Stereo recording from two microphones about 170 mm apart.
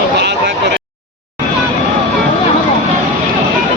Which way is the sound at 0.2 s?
80° right.